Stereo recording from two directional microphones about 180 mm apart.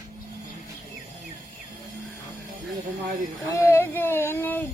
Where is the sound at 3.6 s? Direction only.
15° left (ahead or behind).